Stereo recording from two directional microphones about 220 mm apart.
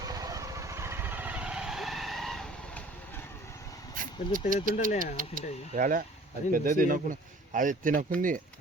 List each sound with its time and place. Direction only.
0.0 s vehicle: 15° right (ahead or behind); by 2.8 s centre (ahead or behind)
3.9 s speech: 40° right (ahead or behind)